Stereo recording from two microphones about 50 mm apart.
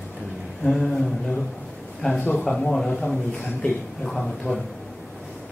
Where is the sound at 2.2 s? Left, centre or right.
Left.